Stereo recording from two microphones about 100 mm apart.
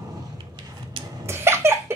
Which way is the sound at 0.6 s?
50° right (ahead or behind).